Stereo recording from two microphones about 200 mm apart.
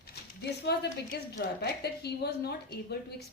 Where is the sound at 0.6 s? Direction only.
55° left (ahead or behind).